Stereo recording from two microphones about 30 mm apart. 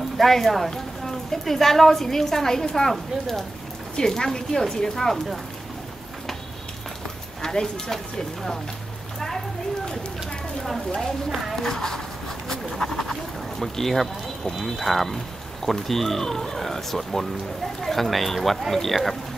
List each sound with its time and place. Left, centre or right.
0.2 s a woman's voice: centre
4.0 s speech: centre
7.4 s speech: left
11.5 s a woman's voice: centre
12.4 s frog: centre
14.6 s a woman's voice: centre